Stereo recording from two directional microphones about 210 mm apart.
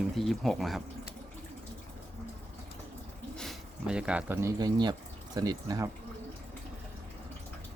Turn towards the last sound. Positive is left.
turn(degrees=-20)  # may be behind; listen again after turning